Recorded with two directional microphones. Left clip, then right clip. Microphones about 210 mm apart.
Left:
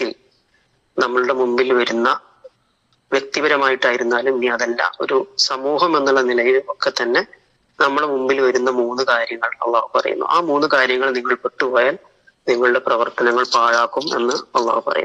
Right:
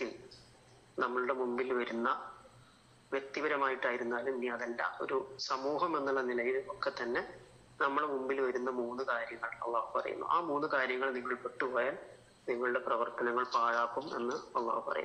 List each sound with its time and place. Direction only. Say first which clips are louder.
0.9 s a man's voice: left 17 dB; 50° left (ahead or behind)